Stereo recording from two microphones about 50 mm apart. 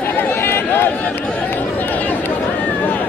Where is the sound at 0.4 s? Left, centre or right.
Left.